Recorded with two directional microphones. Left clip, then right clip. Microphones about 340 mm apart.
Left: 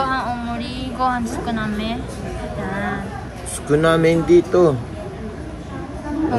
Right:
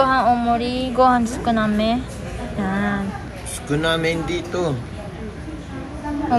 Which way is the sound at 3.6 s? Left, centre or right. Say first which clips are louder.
Left 5 dB; left.